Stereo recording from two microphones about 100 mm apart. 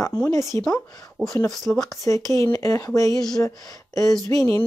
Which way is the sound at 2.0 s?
30° left (ahead or behind).